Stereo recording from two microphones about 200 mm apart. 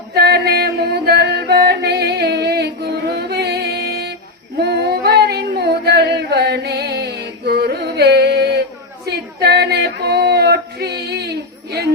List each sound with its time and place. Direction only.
0.1 s chant: 55° right (ahead or behind)
4.5 s female singing: 55° right (ahead or behind)
9.0 s a sound: 55° right (ahead or behind)